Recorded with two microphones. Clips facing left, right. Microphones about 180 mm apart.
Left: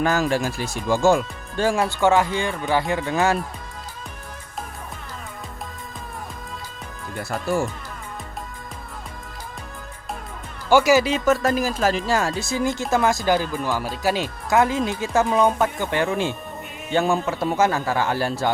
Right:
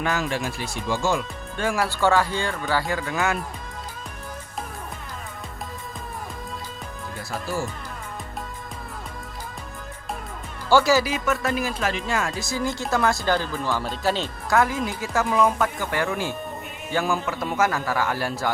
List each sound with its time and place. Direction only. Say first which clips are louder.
0.0 s speech: left 5 dB; 40° left (ahead or behind)
1.5 s speech: left 4 dB; 30° left (ahead or behind)
7.2 s speech: left 6 dB; 60° left (ahead or behind)
10.7 s speech: left 3 dB; 15° left (ahead or behind)
11.4 s speech: left 4 dB; 40° left (ahead or behind); by 14.6 s 10° left (ahead or behind)
14.6 s speech: left 3 dB; 25° left (ahead or behind)